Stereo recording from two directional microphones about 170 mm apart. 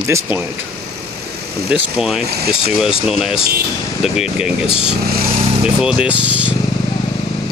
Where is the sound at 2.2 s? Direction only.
70° right (ahead or behind).